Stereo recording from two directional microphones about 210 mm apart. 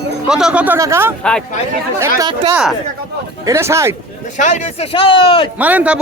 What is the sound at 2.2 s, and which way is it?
Speech, 20° right (ahead or behind).